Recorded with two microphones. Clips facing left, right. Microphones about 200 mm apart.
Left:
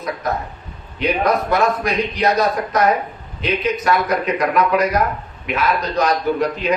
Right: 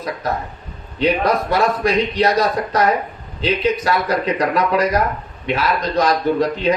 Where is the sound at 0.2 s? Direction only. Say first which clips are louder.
Even; 30° right (ahead or behind).